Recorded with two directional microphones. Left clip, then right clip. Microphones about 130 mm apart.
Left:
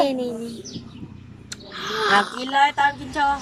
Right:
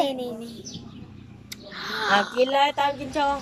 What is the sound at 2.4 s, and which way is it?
A child's voice, 20° right (ahead or behind).